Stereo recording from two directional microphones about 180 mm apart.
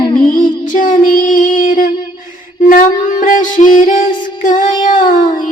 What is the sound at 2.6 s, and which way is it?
Music, 45° left (ahead or behind).